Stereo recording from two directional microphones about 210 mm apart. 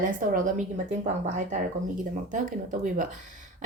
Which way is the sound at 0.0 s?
40° right (ahead or behind).